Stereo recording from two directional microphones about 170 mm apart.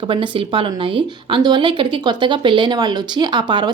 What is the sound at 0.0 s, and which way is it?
Speech, 30° right (ahead or behind).